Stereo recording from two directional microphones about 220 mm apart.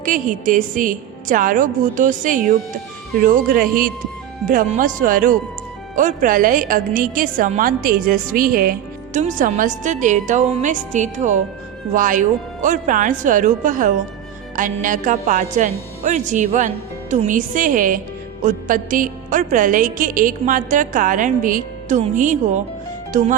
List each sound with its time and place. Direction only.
0.0 s a woman's voice: 35° right (ahead or behind)